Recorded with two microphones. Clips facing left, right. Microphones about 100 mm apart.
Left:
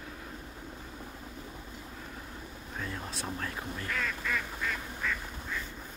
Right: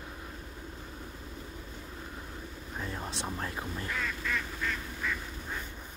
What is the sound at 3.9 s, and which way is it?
Duck, 5° right (ahead or behind).